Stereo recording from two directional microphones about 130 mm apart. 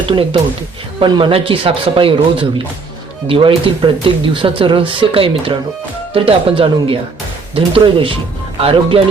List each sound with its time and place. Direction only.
0.1 s speech: 40° right (ahead or behind)